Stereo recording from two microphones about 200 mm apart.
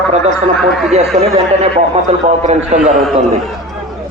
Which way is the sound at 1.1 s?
35° right (ahead or behind).